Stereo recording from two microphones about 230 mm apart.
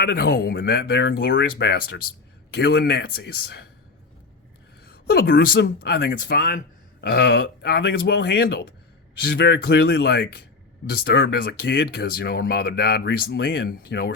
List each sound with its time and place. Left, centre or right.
0.0 s speech: left
4.9 s speech: left